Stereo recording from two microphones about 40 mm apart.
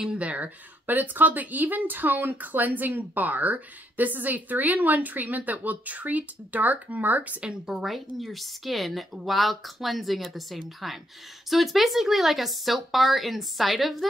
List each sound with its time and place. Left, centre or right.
0.2 s speech: right
0.8 s speech: right
7.8 s speech: centre